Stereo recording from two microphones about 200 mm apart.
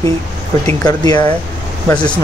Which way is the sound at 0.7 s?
15° left (ahead or behind).